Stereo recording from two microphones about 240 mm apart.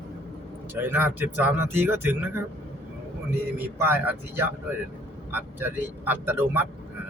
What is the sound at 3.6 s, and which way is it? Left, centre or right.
Speech, centre.